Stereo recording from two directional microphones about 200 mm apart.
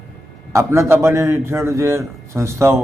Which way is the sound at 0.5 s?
15° right (ahead or behind).